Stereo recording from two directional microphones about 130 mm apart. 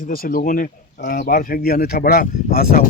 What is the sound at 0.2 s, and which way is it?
Speech, 90° left.